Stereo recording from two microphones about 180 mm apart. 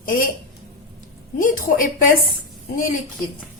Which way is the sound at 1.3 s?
50° left (ahead or behind).